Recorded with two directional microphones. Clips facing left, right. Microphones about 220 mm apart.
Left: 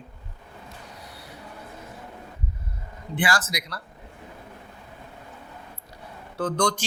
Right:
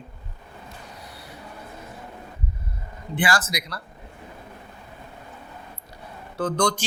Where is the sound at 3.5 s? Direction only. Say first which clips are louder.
Right 2 dB; 10° right (ahead or behind).